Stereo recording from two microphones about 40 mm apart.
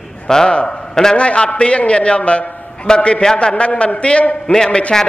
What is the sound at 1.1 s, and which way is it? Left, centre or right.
A man's voice, left.